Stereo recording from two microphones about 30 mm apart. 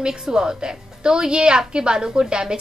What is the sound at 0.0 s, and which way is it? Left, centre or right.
A woman's voice, right.